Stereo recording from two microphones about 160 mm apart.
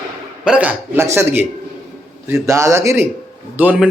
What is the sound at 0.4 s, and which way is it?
Speech, 10° right (ahead or behind).